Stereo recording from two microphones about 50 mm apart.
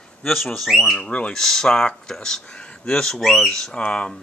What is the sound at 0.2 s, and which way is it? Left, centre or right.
Speech, centre.